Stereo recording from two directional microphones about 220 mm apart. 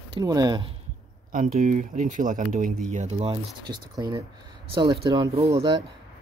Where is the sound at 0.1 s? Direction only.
15° right (ahead or behind).